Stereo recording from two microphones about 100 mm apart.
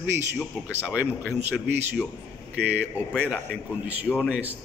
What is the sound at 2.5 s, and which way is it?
A man's voice, 15° right (ahead or behind).